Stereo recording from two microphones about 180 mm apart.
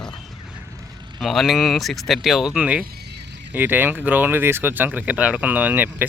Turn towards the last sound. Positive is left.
turn(degrees=-10)  # may be behind; listen again after turning